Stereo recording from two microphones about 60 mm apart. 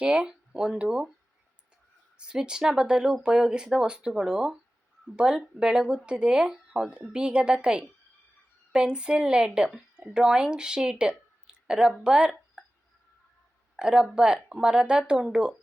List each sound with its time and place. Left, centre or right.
0.0 s speech: centre
2.1 s speech: centre
11.4 s a sound: centre
12.0 s speech: centre
13.7 s speech: centre